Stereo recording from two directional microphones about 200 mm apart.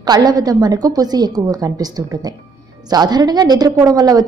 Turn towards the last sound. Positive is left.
turn(degrees=-20)  # may be behind; listen again after turning